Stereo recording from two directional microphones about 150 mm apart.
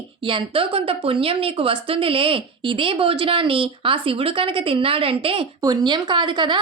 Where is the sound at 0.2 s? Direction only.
35° right (ahead or behind).